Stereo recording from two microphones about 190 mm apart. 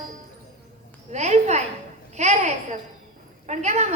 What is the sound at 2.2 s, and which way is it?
A woman's voice, 35° right (ahead or behind).